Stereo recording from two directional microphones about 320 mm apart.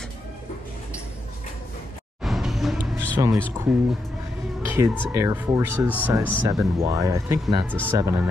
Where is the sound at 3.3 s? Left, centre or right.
Centre.